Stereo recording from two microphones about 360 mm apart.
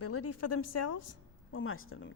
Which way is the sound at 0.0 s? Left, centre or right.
Left.